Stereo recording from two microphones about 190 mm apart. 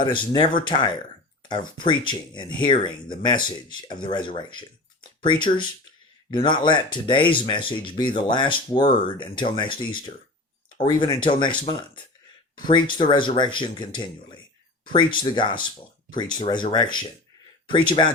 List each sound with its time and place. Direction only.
0.0 s speech: 25° left (ahead or behind)